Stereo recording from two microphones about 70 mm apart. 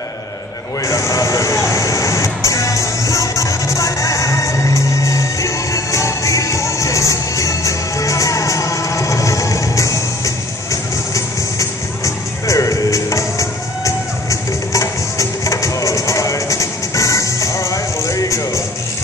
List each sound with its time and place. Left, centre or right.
0.8 s music: left